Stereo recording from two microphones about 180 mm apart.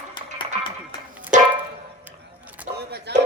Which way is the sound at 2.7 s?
65° right (ahead or behind).